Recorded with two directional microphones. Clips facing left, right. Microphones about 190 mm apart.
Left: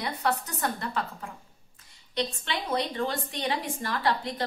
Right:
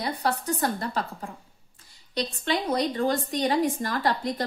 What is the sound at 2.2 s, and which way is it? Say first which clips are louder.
A woman's voice: right 4 dB; 40° right (ahead or behind).